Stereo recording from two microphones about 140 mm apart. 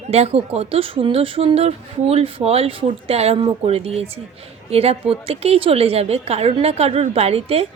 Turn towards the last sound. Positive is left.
turn(degrees=-45)  # may be behind; listen again after turning